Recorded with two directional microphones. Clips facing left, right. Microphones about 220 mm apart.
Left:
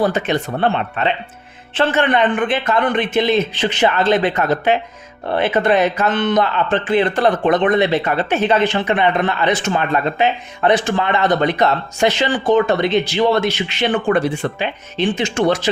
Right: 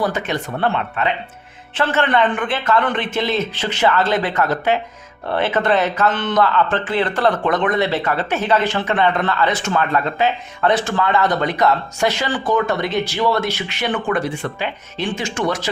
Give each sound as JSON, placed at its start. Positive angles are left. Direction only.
{"t": 0.0, "sound": "a man's voice", "side_deg": 25}